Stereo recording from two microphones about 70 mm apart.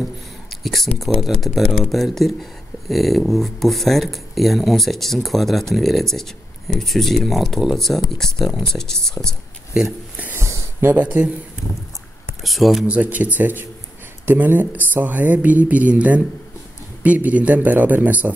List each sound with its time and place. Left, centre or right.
0.5 s speech: centre
10.4 s a sound: right
11.0 s speech: right
12.4 s speech: centre
12.8 s speech: right